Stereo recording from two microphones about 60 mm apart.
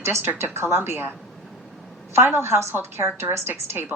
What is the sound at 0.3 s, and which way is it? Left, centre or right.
Speech, right.